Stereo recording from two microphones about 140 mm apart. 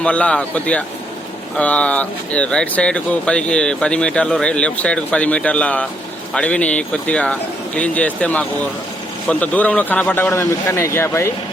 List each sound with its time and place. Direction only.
0.0 s speech: 10° left (ahead or behind)